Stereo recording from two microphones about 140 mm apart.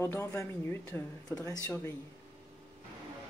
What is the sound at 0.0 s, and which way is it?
Speech, 20° left (ahead or behind).